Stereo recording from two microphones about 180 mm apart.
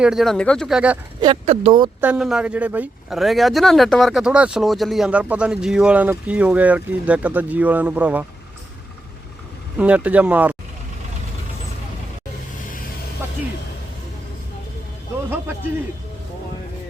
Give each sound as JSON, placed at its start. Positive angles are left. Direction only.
{"t": 0.0, "sound": "speech", "side_deg": 0}
{"t": 1.2, "sound": "speech", "side_deg": -30}
{"t": 2.0, "sound": "speech", "side_deg": -5}
{"t": 9.7, "sound": "speech", "side_deg": -5}